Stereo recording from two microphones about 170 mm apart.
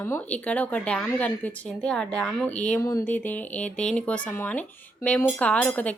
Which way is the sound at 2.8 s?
20° left (ahead or behind).